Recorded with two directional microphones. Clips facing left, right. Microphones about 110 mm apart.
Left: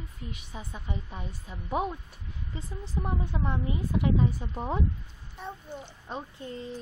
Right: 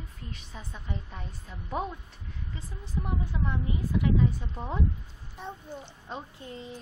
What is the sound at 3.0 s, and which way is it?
A woman's voice, 30° left (ahead or behind).